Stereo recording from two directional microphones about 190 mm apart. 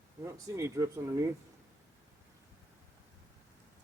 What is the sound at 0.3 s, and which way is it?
Speech, 15° right (ahead or behind).